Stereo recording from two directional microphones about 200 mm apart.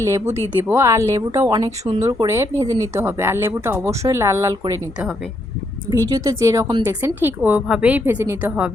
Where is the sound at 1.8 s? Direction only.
35° right (ahead or behind).